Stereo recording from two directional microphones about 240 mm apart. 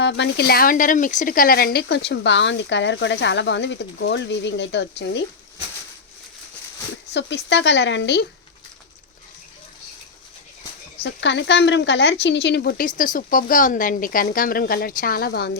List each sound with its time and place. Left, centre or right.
0.0 s speech: left
7.1 s speech: left
11.0 s a woman's voice: left